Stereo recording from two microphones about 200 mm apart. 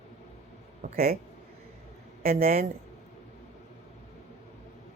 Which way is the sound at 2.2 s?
30° right (ahead or behind).